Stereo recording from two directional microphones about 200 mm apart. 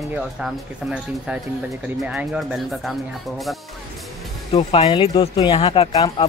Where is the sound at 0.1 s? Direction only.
5° right (ahead or behind).